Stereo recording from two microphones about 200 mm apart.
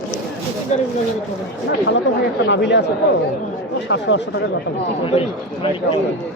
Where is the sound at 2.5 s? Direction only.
60° left (ahead or behind).